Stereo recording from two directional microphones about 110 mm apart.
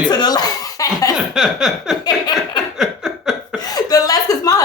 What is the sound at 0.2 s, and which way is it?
Laughter, 35° left (ahead or behind).